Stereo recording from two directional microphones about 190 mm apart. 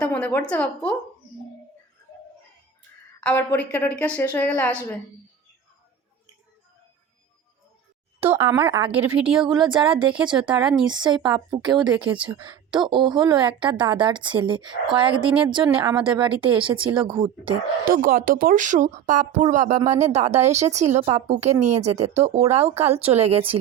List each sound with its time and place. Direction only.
0.0 s a sound: 10° left (ahead or behind)
0.5 s a woman's voice: 5° left (ahead or behind)
3.2 s a woman's voice: 10° left (ahead or behind)
8.3 s speech: 15° right (ahead or behind)
9.4 s speech: 25° right (ahead or behind)
10.5 s speech: 5° right (ahead or behind)
10.8 s speech: 25° right (ahead or behind)
18.0 s speech: 45° right (ahead or behind)